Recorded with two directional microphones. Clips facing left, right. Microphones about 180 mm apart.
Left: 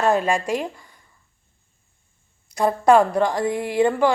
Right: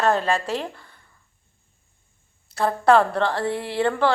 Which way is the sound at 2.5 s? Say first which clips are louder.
Left 2 dB; 15° left (ahead or behind).